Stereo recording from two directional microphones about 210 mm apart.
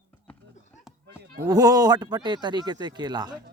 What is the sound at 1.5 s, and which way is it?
Speech, 15° right (ahead or behind).